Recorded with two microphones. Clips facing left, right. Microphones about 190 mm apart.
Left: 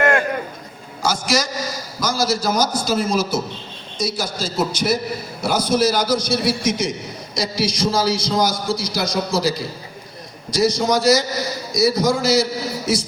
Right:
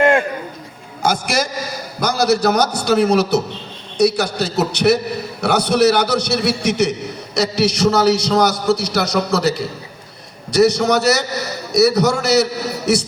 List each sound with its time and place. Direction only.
1.0 s a man's voice: 60° right (ahead or behind)